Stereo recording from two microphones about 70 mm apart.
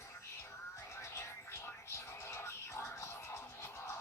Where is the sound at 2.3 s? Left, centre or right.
Left.